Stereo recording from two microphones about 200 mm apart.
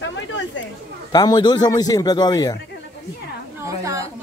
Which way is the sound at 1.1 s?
20° left (ahead or behind).